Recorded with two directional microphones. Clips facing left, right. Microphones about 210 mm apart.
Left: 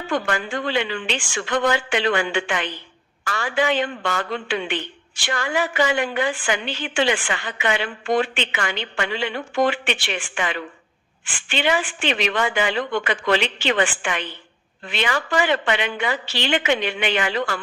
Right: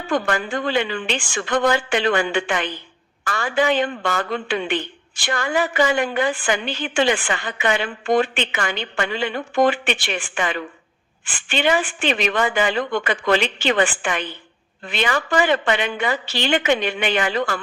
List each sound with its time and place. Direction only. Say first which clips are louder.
0.1 s a woman's voice: right 2 dB; 45° right (ahead or behind)